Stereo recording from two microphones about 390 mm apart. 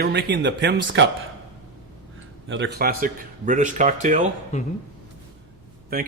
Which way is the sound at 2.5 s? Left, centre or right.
Right.